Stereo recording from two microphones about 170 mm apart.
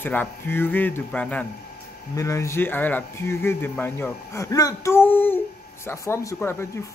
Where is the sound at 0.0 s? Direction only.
10° left (ahead or behind).